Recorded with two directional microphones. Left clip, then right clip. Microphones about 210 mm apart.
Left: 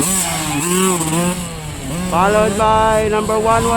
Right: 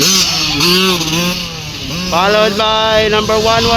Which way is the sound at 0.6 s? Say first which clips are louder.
Right 6 dB; 5° left (ahead or behind).